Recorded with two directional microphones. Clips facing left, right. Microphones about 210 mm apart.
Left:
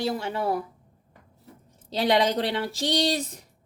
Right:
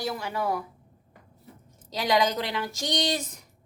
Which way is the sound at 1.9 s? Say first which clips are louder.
Left 2 dB; 30° left (ahead or behind).